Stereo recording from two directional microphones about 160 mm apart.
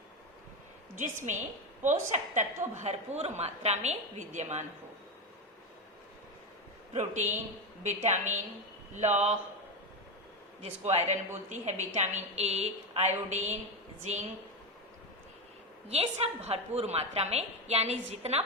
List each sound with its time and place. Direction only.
1.0 s a woman's voice: 50° right (ahead or behind)
6.9 s a woman's voice: 45° right (ahead or behind)
10.6 s a woman's voice: 45° right (ahead or behind)
15.9 s a woman's voice: 40° right (ahead or behind)